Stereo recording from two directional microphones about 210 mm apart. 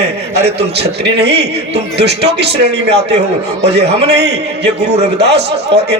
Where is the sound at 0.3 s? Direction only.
50° right (ahead or behind).